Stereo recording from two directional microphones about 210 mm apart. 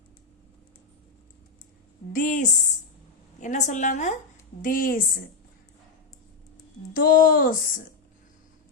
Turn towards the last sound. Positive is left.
turn(degrees=40)  # may be behind; listen again after turning